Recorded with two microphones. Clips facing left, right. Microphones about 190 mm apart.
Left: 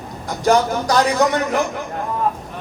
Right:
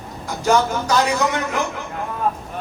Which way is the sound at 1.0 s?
35° left (ahead or behind).